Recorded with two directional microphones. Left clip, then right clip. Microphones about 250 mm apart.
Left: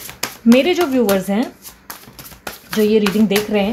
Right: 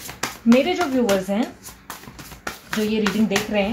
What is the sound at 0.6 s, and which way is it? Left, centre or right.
Speech, left.